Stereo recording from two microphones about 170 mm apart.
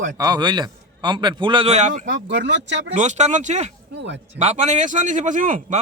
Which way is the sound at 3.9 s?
90° right.